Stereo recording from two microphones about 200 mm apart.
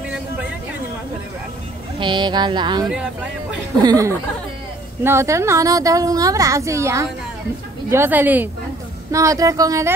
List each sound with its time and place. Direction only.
2.0 s a woman's voice: 25° right (ahead or behind)